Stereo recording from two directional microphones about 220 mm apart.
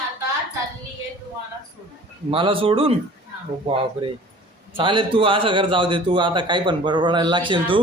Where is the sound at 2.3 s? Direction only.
25° right (ahead or behind).